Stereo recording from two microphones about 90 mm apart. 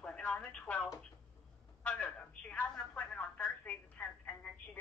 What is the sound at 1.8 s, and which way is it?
Telephone, 15° left (ahead or behind).